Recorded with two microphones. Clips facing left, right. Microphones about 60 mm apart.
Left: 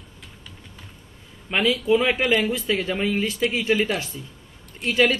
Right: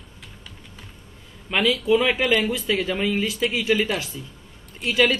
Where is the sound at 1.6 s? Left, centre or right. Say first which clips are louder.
Even; centre.